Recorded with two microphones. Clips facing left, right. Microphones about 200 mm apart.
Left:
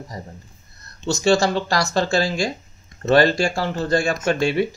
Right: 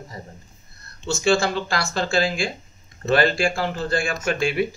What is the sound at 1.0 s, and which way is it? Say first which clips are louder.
Speech: left 3 dB; 40° left (ahead or behind).